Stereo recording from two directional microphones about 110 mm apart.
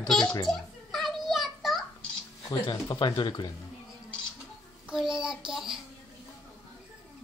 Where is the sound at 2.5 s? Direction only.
40° left (ahead or behind).